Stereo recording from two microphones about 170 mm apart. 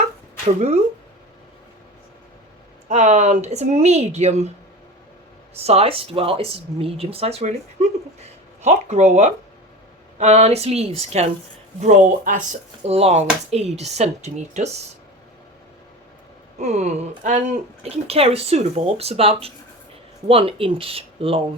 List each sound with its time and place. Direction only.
0.4 s speech: 40° right (ahead or behind)
2.9 s speech: 45° right (ahead or behind)
5.5 s speech: 35° right (ahead or behind)
11.8 s speech: 50° right (ahead or behind)
16.6 s speech: 40° right (ahead or behind)